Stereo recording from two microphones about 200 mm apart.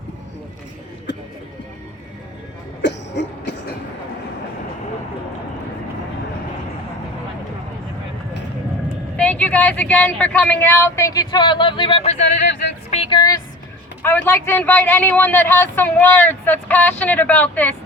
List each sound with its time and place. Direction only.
1.1 s a sound: 60° left (ahead or behind)
2.8 s cough: 60° left (ahead or behind)
9.1 s a woman's voice: 5° left (ahead or behind)